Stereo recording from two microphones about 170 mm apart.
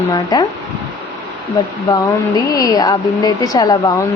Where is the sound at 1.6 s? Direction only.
20° left (ahead or behind).